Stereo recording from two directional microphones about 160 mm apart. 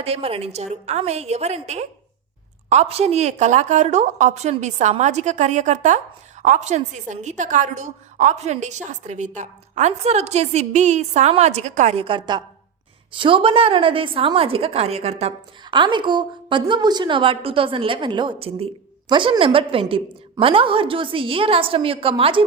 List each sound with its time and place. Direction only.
0.0 s a woman's voice: 40° right (ahead or behind)
15.7 s a woman's voice: 30° right (ahead or behind)